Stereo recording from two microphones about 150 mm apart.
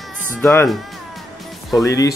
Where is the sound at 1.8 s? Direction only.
25° left (ahead or behind).